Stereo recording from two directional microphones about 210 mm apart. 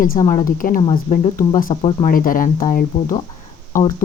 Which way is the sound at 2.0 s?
40° left (ahead or behind).